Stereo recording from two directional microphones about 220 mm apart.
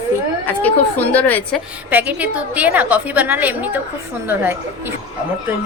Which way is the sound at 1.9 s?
5° right (ahead or behind).